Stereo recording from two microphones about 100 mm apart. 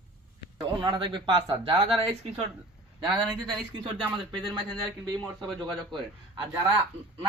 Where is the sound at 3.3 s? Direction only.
45° right (ahead or behind).